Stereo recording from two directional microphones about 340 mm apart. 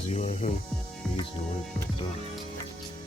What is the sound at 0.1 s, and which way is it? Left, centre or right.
Speech, centre.